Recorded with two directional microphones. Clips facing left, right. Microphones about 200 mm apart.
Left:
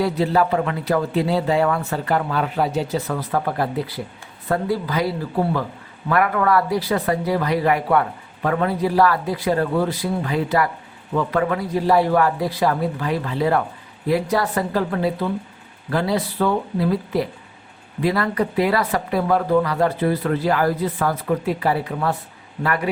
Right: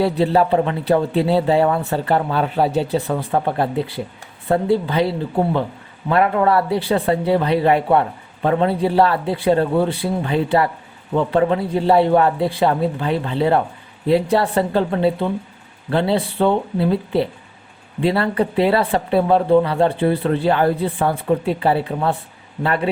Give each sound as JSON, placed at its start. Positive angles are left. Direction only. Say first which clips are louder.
{"t": 0.0, "sound": "speech", "louder": "right 3 dB", "side_deg": -30}